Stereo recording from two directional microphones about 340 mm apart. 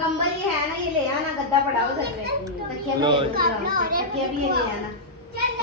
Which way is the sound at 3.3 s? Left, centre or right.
Right.